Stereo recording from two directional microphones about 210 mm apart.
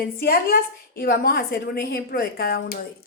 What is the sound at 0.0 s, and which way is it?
A woman's voice, 45° left (ahead or behind).